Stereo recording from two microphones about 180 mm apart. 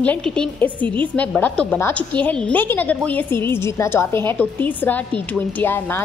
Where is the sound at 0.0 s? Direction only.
5° left (ahead or behind).